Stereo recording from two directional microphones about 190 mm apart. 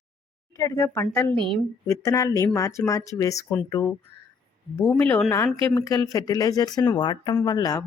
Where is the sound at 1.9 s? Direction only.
15° left (ahead or behind).